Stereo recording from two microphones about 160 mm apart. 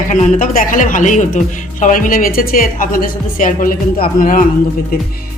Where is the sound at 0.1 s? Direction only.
50° left (ahead or behind).